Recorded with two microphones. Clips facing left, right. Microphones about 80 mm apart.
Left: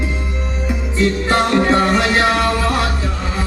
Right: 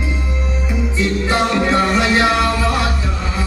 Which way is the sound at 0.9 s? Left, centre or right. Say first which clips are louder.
Left 2 dB; left.